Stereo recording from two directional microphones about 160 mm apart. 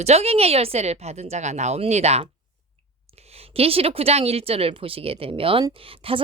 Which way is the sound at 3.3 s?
35° right (ahead or behind).